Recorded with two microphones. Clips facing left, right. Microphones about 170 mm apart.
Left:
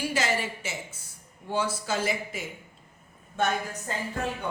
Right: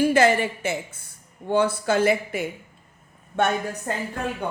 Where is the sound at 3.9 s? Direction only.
60° right (ahead or behind).